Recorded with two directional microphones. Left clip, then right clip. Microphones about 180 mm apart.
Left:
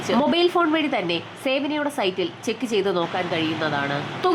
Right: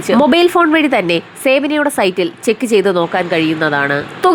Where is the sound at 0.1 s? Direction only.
30° right (ahead or behind).